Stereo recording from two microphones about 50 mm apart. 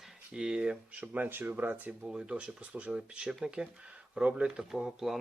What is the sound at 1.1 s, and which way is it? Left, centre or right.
Speech, right.